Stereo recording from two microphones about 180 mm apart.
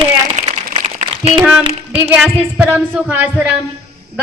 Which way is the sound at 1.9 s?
10° right (ahead or behind).